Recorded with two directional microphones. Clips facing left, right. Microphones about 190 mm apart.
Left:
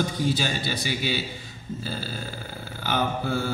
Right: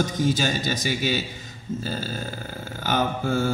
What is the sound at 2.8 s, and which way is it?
Speech, 45° right (ahead or behind).